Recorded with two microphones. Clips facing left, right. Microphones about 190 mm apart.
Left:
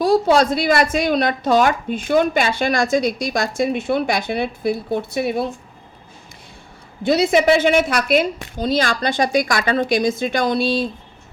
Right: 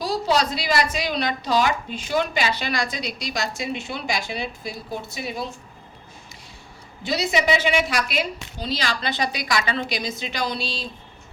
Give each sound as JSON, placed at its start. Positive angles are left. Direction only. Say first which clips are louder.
{"t": 0.0, "sound": "speech", "louder": "left 8 dB", "side_deg": 55}
{"t": 7.0, "sound": "speech", "louder": "left 8 dB", "side_deg": 55}